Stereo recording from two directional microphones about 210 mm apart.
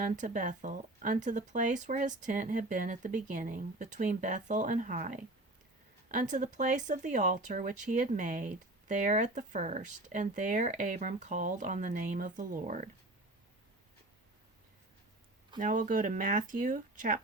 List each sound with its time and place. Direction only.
0.0 s speech: 35° right (ahead or behind)
15.5 s speech: 40° right (ahead or behind)